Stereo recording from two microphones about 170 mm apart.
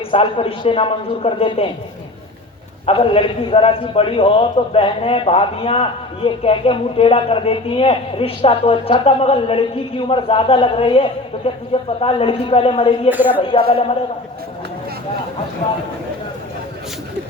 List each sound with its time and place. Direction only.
0.1 s a man's voice: 30° left (ahead or behind)
2.8 s a man's voice: 35° left (ahead or behind)
13.1 s speech: 10° right (ahead or behind)
13.5 s a man's voice: 30° left (ahead or behind)